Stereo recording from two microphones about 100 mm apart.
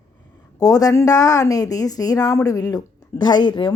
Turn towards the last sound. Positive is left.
turn(degrees=50)  # may be behind; listen again after turning